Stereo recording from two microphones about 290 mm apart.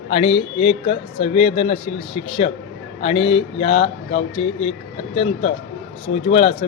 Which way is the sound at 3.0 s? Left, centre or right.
Centre.